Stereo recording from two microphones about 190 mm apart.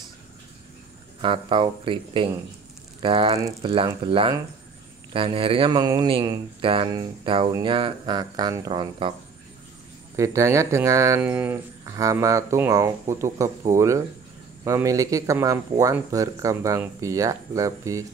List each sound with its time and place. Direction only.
1.2 s speech: 25° right (ahead or behind)
10.1 s speech: 15° right (ahead or behind)